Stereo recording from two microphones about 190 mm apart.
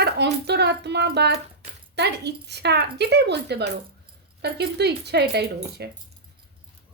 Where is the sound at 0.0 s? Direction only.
60° right (ahead or behind).